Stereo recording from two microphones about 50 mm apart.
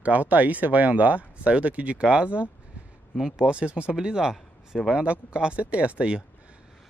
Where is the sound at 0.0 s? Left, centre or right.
Right; by 4.9 s centre.